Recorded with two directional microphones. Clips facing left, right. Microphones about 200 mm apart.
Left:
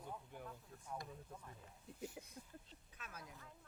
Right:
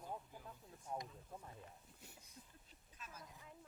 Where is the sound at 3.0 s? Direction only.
65° left (ahead or behind).